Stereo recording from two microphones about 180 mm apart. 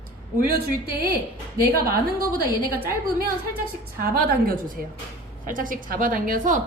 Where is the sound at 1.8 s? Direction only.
55° right (ahead or behind).